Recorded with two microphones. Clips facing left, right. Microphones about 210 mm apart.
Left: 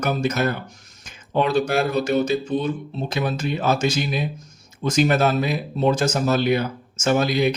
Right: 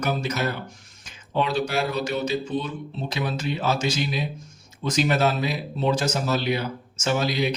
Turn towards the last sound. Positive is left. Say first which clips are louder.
# left 5 dB
turn(degrees=50)  # may be behind; listen again after turning